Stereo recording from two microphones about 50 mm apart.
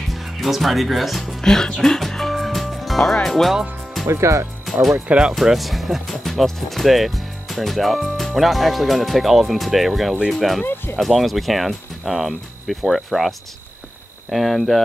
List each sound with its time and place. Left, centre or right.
0.1 s speech: centre
1.4 s speech: centre
4.1 s speech: right
5.0 s speech: right
5.3 s speech: centre
10.6 s speech: left
11.0 s speech: centre
14.3 s speech: centre